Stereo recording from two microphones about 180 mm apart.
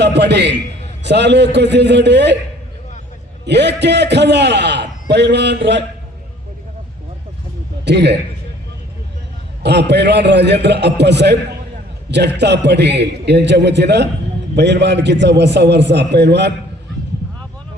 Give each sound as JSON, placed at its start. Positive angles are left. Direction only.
{"t": 0.0, "sound": "a man's voice", "side_deg": -70}
{"t": 3.4, "sound": "a man's voice", "side_deg": -70}
{"t": 7.9, "sound": "a man's voice", "side_deg": -70}
{"t": 9.6, "sound": "a man's voice", "side_deg": -70}
{"t": 12.4, "sound": "a man's voice", "side_deg": -70}